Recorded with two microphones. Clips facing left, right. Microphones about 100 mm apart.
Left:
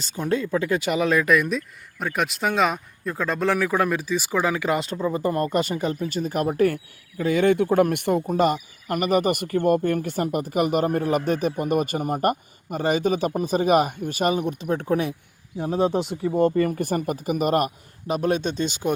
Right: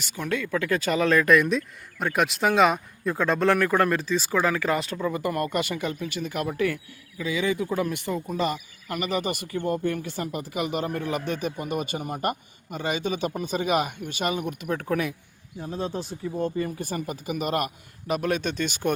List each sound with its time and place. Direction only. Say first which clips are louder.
0.0 s a man's voice: left 4 dB; 30° left (ahead or behind)
7.2 s speech: left 7 dB; 55° left (ahead or behind)
8.3 s speech: left 6 dB; 50° left (ahead or behind); by 15.1 s 30° left (ahead or behind)
15.5 s speech: left 9 dB; 75° left (ahead or behind)
16.6 s speech: left 7 dB; 60° left (ahead or behind); by 17.7 s 40° left (ahead or behind)
18.1 s a man's voice: left 3 dB; 30° left (ahead or behind)